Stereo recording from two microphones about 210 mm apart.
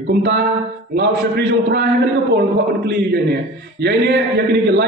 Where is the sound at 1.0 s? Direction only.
55° right (ahead or behind).